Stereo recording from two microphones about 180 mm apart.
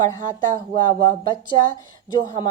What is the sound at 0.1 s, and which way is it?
Speech, 20° left (ahead or behind).